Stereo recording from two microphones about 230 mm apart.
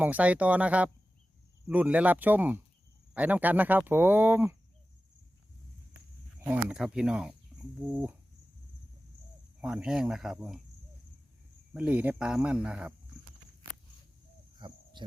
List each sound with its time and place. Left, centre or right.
0.0 s speech: centre
6.7 s speech: centre
9.6 s speech: centre
11.7 s speech: centre
14.6 s speech: centre
15.0 s insect: centre